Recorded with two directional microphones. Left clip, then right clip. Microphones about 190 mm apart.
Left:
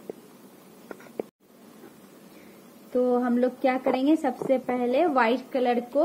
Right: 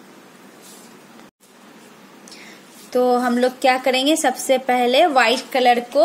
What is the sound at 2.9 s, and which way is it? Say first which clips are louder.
A woman's voice: right 7 dB; 5° left (ahead or behind).